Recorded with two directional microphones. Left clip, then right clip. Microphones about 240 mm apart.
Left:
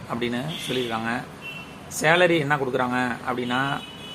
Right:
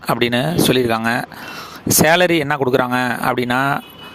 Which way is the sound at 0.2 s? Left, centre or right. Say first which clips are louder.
Right 12 dB; right.